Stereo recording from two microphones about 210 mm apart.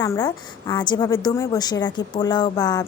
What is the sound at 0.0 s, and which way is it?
A woman's voice, 15° left (ahead or behind).